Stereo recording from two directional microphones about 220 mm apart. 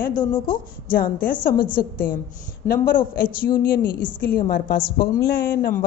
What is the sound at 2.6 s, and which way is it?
A woman's voice, 40° left (ahead or behind).